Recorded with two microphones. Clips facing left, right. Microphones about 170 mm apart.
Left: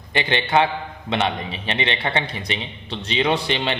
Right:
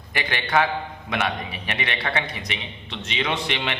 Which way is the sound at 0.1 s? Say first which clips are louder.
Left 4 dB; 25° left (ahead or behind).